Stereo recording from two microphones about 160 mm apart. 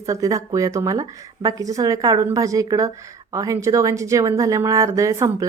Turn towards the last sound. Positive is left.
turn(degrees=-20)  # may be behind; listen again after turning